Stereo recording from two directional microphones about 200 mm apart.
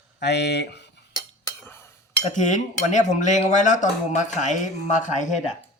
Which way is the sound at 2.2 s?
35° left (ahead or behind).